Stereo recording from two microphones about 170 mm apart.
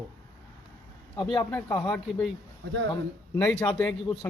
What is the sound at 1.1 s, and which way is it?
Speech, 30° left (ahead or behind).